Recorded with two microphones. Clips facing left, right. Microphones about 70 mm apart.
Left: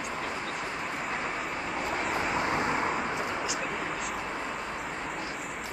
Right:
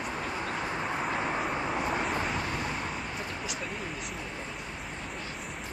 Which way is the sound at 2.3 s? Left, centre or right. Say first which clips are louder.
Left 5 dB; left.